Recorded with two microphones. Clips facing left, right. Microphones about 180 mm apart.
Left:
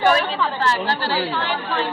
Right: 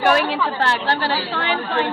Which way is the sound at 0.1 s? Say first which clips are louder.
Right 1 dB; 65° right (ahead or behind).